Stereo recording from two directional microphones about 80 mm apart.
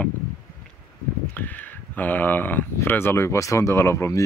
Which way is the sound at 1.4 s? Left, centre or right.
Left.